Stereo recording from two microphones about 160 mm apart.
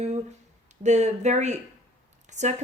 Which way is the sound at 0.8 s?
45° right (ahead or behind).